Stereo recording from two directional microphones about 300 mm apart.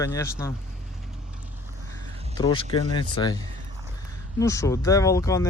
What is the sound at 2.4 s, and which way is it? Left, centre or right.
Speech, centre.